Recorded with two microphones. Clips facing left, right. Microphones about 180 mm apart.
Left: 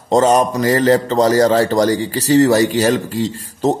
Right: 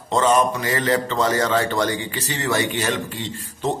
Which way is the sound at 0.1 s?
40° left (ahead or behind).